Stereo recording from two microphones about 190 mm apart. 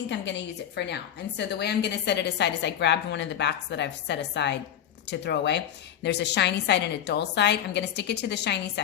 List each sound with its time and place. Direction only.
0.1 s a woman's voice: 65° left (ahead or behind)